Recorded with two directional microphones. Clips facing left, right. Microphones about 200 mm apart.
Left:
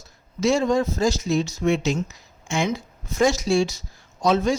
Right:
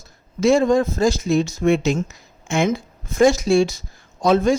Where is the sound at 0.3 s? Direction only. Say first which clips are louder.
Right 4 dB; 55° right (ahead or behind).